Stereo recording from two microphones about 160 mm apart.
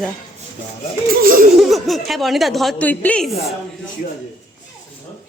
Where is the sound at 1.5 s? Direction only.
Centre (ahead or behind).